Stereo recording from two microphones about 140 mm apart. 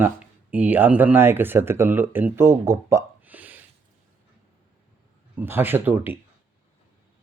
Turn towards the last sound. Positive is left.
turn(degrees=-15)  # may be behind; listen again after turning